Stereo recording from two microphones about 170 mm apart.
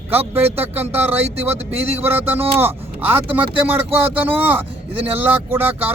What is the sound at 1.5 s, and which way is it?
Speech, 35° right (ahead or behind).